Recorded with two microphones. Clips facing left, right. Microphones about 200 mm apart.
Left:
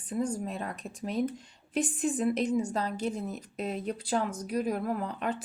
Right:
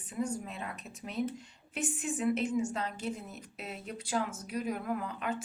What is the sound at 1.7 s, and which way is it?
Speech, 35° left (ahead or behind).